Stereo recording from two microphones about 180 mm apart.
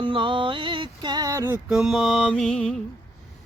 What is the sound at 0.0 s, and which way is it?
Music, 30° right (ahead or behind).